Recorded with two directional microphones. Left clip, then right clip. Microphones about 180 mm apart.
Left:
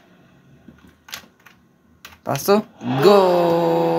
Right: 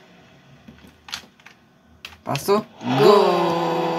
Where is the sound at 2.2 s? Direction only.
45° left (ahead or behind).